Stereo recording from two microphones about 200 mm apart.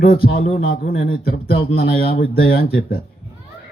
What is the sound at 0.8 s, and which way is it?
Speech, 50° left (ahead or behind).